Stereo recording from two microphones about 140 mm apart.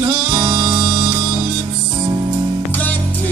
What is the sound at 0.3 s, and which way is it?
Music, 25° right (ahead or behind).